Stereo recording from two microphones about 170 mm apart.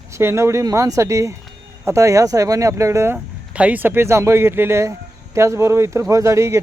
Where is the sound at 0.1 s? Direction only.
15° right (ahead or behind).